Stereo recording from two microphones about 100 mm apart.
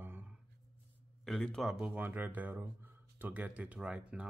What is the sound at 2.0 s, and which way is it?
Speech, 15° right (ahead or behind).